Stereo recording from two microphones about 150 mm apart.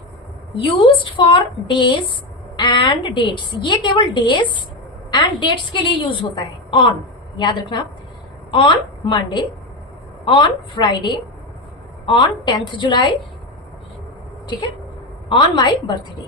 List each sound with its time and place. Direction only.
0.5 s a woman's voice: 35° left (ahead or behind)
15.3 s a woman's voice: 30° left (ahead or behind)